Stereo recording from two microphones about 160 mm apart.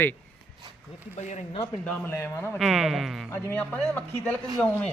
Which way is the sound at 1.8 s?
10° left (ahead or behind).